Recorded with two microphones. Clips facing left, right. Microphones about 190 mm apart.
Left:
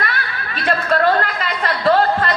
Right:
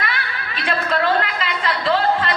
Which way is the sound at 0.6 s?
50° left (ahead or behind).